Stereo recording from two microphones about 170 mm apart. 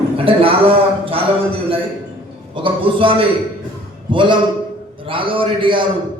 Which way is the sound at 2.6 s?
30° right (ahead or behind).